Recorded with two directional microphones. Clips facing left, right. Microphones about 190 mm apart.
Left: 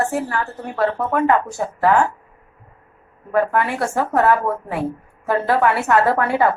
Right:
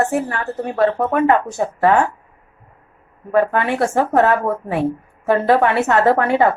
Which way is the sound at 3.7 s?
25° right (ahead or behind).